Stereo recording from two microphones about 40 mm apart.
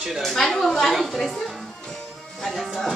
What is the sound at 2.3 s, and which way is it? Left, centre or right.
Music, centre.